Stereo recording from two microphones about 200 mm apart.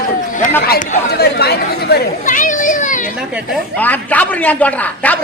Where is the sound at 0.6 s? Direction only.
50° left (ahead or behind).